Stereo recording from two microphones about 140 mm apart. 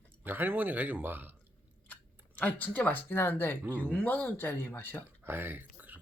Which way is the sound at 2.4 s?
10° left (ahead or behind).